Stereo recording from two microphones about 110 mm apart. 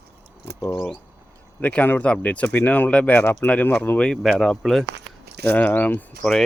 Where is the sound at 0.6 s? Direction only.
20° left (ahead or behind); by 4.9 s 5° left (ahead or behind).